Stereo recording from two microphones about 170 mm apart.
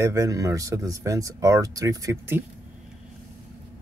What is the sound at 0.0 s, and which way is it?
Speech, 20° right (ahead or behind).